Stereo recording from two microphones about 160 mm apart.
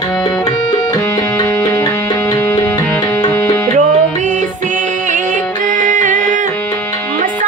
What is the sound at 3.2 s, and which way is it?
Tabla, 15° left (ahead or behind).